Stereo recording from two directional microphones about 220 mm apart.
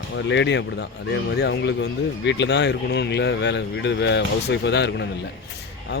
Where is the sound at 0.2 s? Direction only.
55° left (ahead or behind).